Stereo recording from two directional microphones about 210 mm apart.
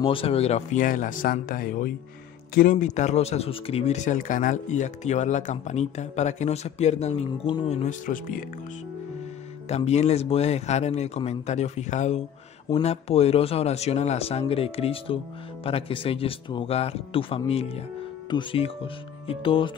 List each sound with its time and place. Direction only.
0.0 s speech: 25° left (ahead or behind)
9.7 s speech: 30° left (ahead or behind)